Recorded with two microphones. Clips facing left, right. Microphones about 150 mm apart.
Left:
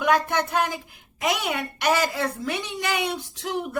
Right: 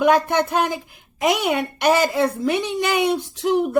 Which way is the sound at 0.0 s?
25° right (ahead or behind).